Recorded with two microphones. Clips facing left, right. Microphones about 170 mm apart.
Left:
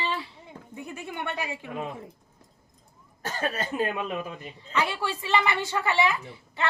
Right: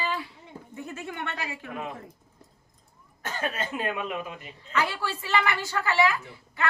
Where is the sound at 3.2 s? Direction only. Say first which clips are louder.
Left 2 dB; 35° left (ahead or behind).